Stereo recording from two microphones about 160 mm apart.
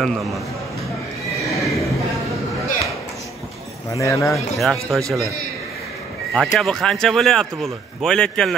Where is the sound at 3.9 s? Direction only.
20° left (ahead or behind).